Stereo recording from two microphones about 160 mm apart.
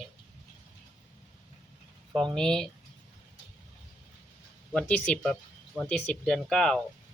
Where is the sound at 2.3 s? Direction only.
5° left (ahead or behind).